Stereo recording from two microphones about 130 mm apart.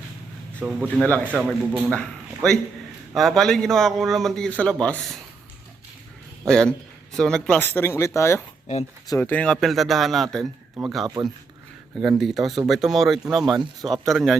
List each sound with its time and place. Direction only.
0.6 s speech: 5° right (ahead or behind)
1.0 s speech: 10° left (ahead or behind)
1.3 s speech: 5° right (ahead or behind)
1.7 s speech: 5° left (ahead or behind)
6.5 s speech: 5° left (ahead or behind)
11.0 s speech: 30° right (ahead or behind)
11.9 s speech: centre (ahead or behind)